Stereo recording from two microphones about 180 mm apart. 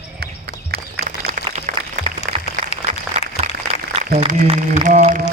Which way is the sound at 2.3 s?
50° right (ahead or behind).